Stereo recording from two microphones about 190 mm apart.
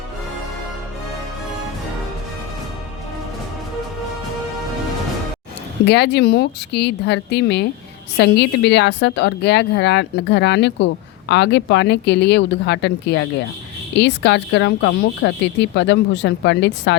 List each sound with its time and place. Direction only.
5.8 s a woman's voice: 60° left (ahead or behind)